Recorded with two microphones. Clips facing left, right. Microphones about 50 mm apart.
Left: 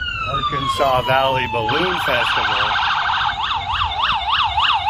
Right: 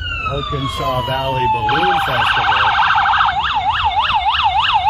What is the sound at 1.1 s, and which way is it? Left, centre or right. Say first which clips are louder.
Speech: left 3 dB; left.